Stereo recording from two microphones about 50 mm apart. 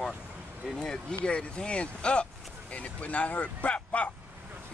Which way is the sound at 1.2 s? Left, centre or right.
Left.